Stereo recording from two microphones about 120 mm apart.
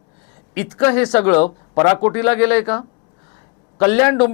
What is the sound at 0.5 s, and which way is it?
Speech, 20° left (ahead or behind).